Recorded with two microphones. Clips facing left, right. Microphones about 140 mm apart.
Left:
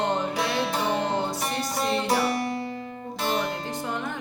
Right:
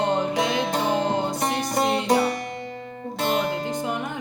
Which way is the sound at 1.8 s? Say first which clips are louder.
Right 3 dB; 20° right (ahead or behind).